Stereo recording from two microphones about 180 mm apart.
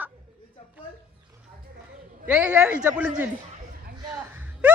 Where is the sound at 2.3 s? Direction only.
5° right (ahead or behind).